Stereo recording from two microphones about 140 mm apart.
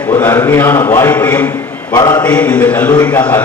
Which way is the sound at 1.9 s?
30° left (ahead or behind).